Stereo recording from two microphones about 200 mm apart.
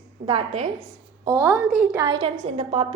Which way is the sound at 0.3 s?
25° right (ahead or behind).